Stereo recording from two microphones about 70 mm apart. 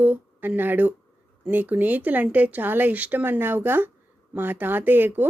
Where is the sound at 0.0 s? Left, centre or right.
Right.